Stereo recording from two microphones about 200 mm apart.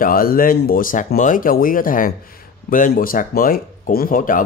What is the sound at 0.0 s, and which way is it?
Speech, 45° left (ahead or behind).